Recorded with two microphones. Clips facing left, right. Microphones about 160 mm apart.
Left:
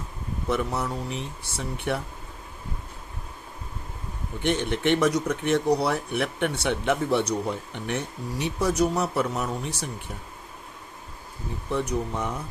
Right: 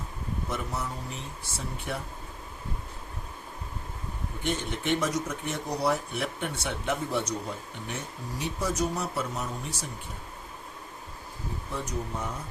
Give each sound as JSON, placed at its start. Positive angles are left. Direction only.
{"t": 0.4, "sound": "speech", "side_deg": 65}
{"t": 4.4, "sound": "speech", "side_deg": 70}
{"t": 11.7, "sound": "speech", "side_deg": 65}